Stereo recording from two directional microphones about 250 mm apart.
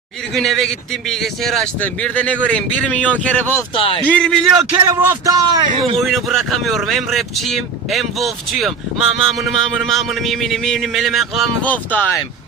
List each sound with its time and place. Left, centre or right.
0.3 s speech: centre
3.8 s a man's voice: left
4.0 s speech: centre
4.7 s a man's voice: centre
6.0 s speech: centre